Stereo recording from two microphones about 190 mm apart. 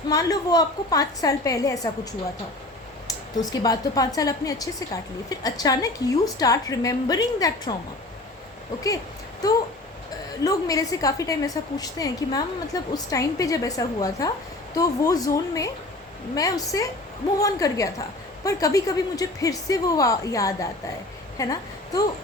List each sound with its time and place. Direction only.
0.1 s a woman's voice: 20° left (ahead or behind)
3.1 s a woman's voice: 20° left (ahead or behind)
9.4 s a woman's voice: 20° left (ahead or behind)